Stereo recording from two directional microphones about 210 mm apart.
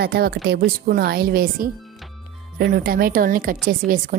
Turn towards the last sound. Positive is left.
turn(degrees=-45)  # may be behind; listen again after turning